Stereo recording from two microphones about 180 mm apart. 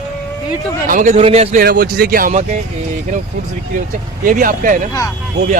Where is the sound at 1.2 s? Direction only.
35° right (ahead or behind).